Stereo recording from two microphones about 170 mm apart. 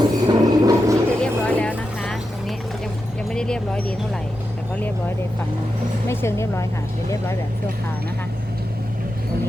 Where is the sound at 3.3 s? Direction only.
5° left (ahead or behind).